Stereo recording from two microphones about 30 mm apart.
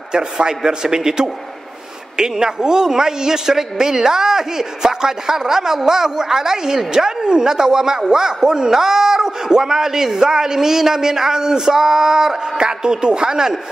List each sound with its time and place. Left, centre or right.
0.1 s a man's voice: right